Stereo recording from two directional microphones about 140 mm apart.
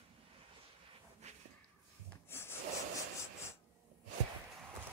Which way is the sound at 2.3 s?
15° left (ahead or behind).